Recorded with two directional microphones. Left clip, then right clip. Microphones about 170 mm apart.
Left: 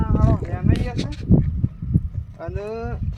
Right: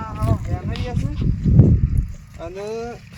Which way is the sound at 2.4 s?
15° right (ahead or behind).